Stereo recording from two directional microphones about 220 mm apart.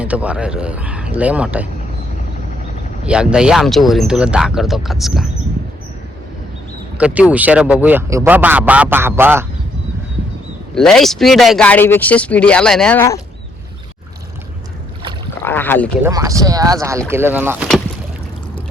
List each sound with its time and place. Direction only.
0.0 s speech: 5° right (ahead or behind)
3.1 s speech: 5° right (ahead or behind)
7.0 s speech: 5° right (ahead or behind)
10.8 s speech: centre (ahead or behind)
15.4 s speech: 10° left (ahead or behind)
16.0 s speech: 15° right (ahead or behind)